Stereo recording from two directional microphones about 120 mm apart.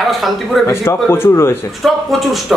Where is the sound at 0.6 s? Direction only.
20° left (ahead or behind).